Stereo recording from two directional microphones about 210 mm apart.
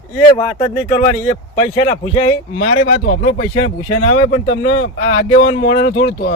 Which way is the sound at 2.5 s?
45° left (ahead or behind).